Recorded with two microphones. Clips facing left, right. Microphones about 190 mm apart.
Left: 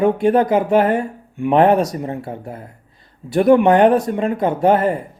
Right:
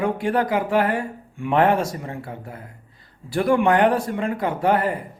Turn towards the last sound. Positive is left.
turn(degrees=25)  # may be behind; listen again after turning